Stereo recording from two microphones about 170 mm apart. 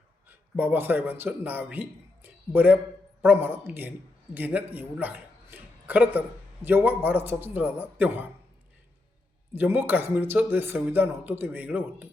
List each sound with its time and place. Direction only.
0.3 s a man's voice: 10° right (ahead or behind)
9.6 s speech: 10° right (ahead or behind)